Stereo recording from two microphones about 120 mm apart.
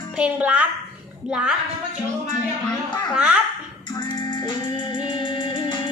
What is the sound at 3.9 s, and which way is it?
Music, 40° left (ahead or behind).